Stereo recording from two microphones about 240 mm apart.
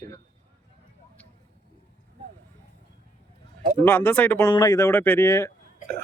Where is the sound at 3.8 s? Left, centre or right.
Centre.